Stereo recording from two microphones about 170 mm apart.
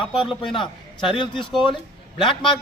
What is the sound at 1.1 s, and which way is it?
Speech, 30° left (ahead or behind).